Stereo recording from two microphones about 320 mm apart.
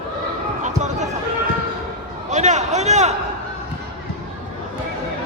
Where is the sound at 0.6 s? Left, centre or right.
Right.